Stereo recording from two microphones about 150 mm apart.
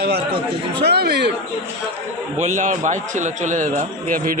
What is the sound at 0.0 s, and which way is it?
Speech, 90° right.